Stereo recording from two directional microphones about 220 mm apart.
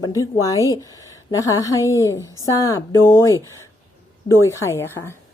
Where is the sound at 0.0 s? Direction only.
15° left (ahead or behind).